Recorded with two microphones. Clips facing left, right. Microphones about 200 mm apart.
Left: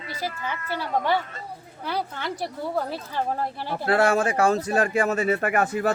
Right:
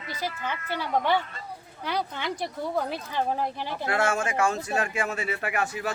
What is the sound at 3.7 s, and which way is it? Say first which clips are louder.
Speech: left 7 dB; 35° left (ahead or behind).